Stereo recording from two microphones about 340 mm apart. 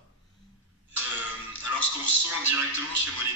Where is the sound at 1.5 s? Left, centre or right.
Left.